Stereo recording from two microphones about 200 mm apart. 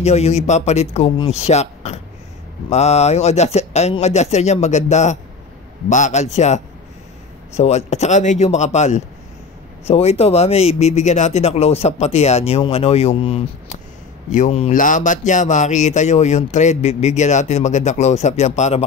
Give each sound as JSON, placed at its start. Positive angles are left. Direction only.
{"t": 0.0, "sound": "speech", "side_deg": 35}